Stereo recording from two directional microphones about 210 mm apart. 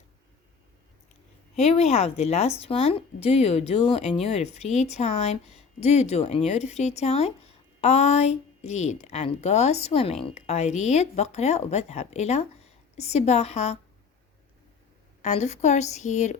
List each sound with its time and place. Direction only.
1.5 s a woman's voice: 30° left (ahead or behind)
15.2 s a woman's voice: 35° left (ahead or behind)